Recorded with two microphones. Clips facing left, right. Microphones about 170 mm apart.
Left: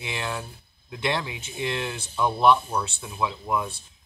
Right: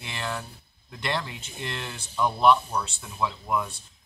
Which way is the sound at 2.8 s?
15° left (ahead or behind).